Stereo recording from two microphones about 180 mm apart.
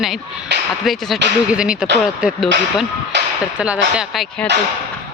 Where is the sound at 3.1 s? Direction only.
70° right (ahead or behind).